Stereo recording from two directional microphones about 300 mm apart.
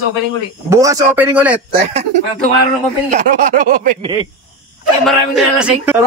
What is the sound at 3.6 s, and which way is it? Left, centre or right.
Speech, right.